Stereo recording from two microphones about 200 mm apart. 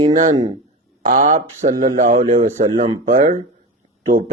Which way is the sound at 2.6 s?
40° right (ahead or behind).